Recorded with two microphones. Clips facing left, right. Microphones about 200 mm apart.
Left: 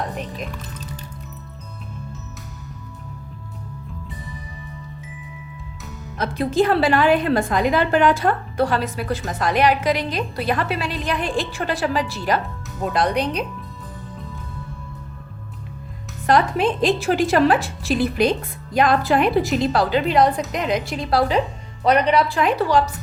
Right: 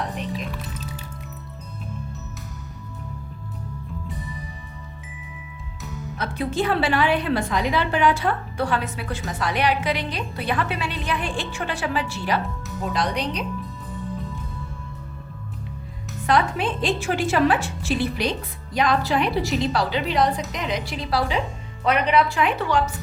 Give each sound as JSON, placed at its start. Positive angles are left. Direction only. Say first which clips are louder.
{"t": 6.1, "sound": "a woman's voice", "louder": "left 6 dB", "side_deg": 40}
{"t": 12.9, "sound": "speech", "louder": "left 5 dB", "side_deg": 55}
{"t": 16.2, "sound": "a woman's voice", "louder": "left 4 dB", "side_deg": 40}